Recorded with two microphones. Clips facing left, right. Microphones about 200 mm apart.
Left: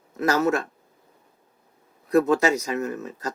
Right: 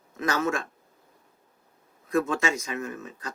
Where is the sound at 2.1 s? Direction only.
35° left (ahead or behind).